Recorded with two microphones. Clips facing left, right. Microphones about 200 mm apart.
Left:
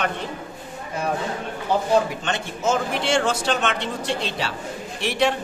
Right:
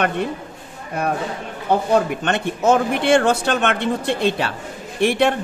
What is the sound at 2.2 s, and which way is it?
Speech, 60° right (ahead or behind).